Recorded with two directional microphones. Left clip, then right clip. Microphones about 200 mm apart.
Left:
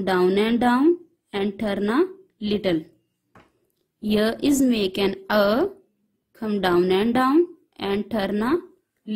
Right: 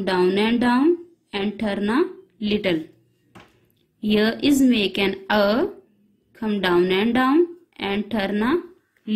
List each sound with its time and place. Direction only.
0.0 s a woman's voice: 50° left (ahead or behind)
4.1 s a woman's voice: 50° left (ahead or behind)